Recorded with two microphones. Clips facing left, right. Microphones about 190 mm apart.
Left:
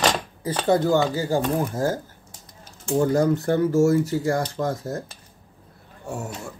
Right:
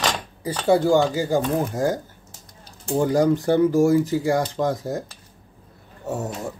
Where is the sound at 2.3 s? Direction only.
35° right (ahead or behind).